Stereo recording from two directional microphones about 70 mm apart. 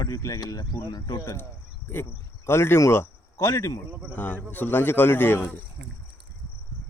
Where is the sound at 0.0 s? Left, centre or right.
Left.